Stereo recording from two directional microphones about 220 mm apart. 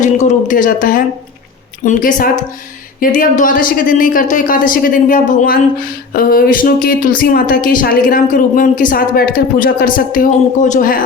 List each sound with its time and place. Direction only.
0.0 s speech: 35° left (ahead or behind)